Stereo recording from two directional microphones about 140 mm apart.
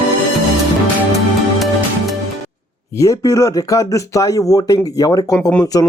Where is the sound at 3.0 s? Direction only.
25° left (ahead or behind).